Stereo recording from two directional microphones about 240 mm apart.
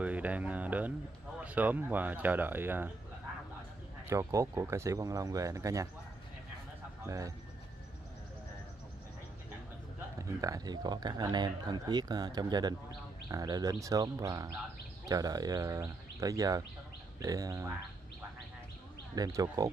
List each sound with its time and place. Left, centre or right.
0.0 s music: centre
1.4 s speech: centre
4.1 s speech: centre
7.1 s speech: centre
10.4 s speech: centre
19.1 s speech: centre